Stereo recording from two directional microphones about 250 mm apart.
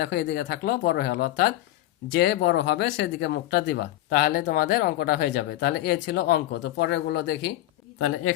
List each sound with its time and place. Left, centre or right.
0.0 s speech: left
7.9 s speech: left